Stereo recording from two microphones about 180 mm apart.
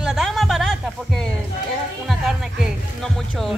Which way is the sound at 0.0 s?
5° right (ahead or behind).